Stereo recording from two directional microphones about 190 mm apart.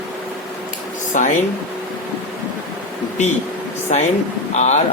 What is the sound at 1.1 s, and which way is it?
Speech, 40° left (ahead or behind).